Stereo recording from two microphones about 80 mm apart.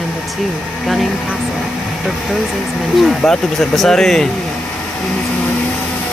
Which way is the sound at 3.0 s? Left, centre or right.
Centre.